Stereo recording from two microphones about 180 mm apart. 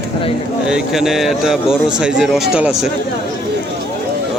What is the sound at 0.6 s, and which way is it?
Speech, 5° right (ahead or behind).